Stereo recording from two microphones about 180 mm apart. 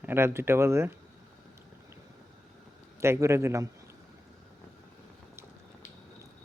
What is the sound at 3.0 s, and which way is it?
Speech, 15° right (ahead or behind).